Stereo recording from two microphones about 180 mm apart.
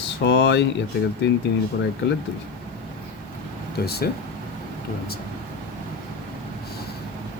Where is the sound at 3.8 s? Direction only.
60° left (ahead or behind).